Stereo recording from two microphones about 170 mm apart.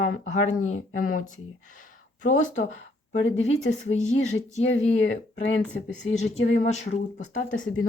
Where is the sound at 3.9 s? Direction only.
40° left (ahead or behind).